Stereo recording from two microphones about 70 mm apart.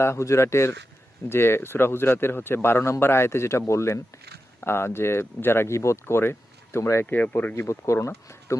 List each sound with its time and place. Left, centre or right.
0.0 s speech: left
7.0 s speech: left
7.9 s speech: left